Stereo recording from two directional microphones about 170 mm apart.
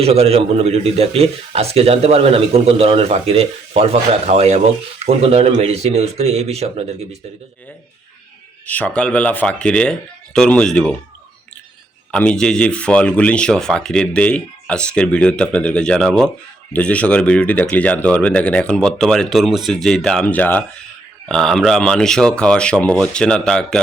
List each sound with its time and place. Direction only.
0.0 s a man's voice: 35° right (ahead or behind)
8.6 s speech: 10° left (ahead or behind)
12.1 s speech: 5° left (ahead or behind)